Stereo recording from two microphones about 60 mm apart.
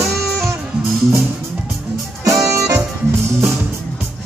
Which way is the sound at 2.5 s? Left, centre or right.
Right.